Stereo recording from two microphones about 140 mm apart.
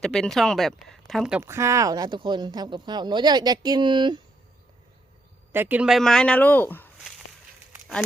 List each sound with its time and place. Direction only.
0.0 s speech: 5° left (ahead or behind)
1.4 s speech: 20° right (ahead or behind)
5.5 s speech: 15° right (ahead or behind); by 6.9 s 15° left (ahead or behind)